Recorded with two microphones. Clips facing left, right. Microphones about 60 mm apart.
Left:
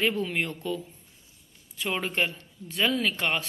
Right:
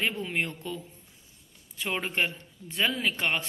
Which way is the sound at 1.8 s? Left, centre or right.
Right.